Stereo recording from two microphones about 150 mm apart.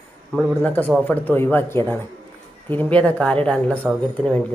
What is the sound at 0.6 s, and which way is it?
A woman's voice, 10° left (ahead or behind).